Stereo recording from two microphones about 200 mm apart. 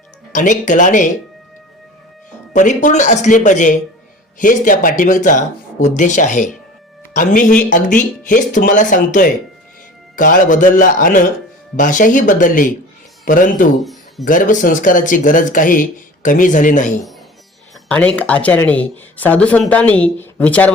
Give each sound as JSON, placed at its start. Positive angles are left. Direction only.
{"t": 0.3, "sound": "speech", "side_deg": 40}
{"t": 2.5, "sound": "speech", "side_deg": 40}
{"t": 13.7, "sound": "music", "side_deg": 0}
{"t": 14.3, "sound": "speech", "side_deg": 40}
{"t": 17.8, "sound": "speech", "side_deg": 5}